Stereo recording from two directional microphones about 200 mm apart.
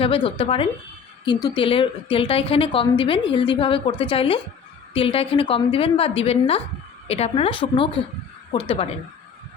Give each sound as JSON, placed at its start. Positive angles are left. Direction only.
{"t": 0.0, "sound": "a woman's voice", "side_deg": 25}